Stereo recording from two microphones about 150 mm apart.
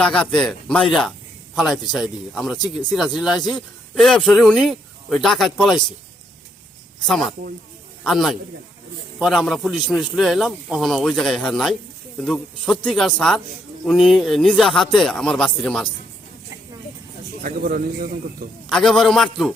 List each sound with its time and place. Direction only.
0.0 s speech: 5° left (ahead or behind)
7.1 s speech: centre (ahead or behind)
17.4 s speech: 65° right (ahead or behind)
18.7 s speech: 5° left (ahead or behind)